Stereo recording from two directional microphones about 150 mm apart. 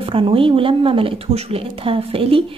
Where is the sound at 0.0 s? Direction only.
35° right (ahead or behind).